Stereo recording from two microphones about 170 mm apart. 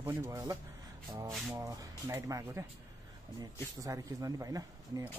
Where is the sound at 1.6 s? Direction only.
15° right (ahead or behind).